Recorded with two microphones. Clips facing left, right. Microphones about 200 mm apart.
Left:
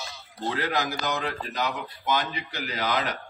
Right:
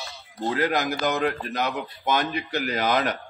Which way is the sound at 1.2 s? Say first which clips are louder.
Right 4 dB; 55° right (ahead or behind).